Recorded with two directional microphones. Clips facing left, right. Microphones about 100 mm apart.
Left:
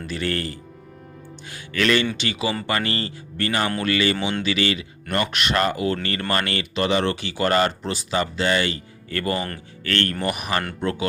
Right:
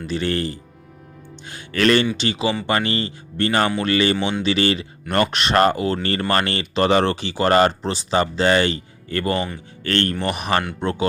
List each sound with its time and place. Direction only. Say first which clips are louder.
0.1 s speech: right 4 dB; 25° right (ahead or behind)
1.5 s speech: right 4 dB; 35° right (ahead or behind)
4.2 s speech: right 2 dB; centre (ahead or behind)
4.4 s speech: right 4 dB; 35° right (ahead or behind)